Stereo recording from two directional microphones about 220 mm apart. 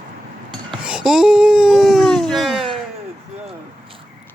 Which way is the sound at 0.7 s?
5° right (ahead or behind).